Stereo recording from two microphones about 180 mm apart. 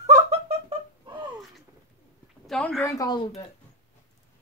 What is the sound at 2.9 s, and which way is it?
Speech, 20° left (ahead or behind).